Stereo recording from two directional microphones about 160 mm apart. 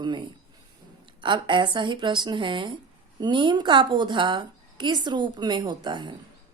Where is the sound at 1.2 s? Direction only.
30° right (ahead or behind).